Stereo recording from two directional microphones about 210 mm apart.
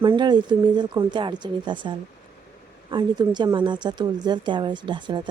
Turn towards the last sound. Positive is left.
turn(degrees=-20)  # may be behind; listen again after turning